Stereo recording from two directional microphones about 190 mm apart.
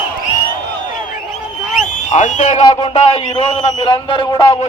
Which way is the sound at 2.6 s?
25° left (ahead or behind).